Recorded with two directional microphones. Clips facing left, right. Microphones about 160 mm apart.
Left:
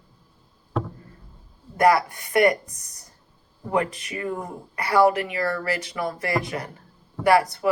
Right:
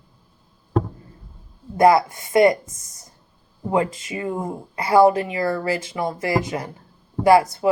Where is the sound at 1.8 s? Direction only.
25° right (ahead or behind).